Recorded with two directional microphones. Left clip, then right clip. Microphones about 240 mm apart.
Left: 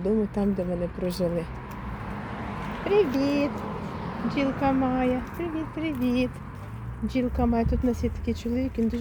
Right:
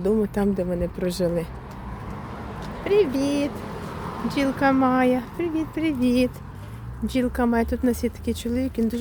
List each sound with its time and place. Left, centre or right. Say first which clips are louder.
0.0 s speech: right 4 dB; centre
2.8 s speech: right 2 dB; centre
4.3 s speech: right 4 dB; right